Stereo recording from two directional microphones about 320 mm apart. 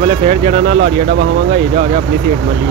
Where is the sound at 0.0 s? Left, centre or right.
Centre.